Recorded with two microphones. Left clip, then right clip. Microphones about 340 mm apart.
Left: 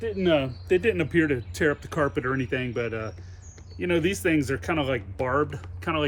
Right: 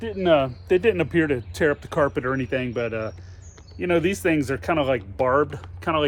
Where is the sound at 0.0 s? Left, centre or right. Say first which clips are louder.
Right 4 dB; centre.